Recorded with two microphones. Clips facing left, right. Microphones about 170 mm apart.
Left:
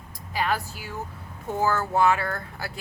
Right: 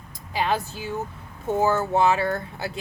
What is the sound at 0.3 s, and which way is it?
A woman's voice, 25° right (ahead or behind).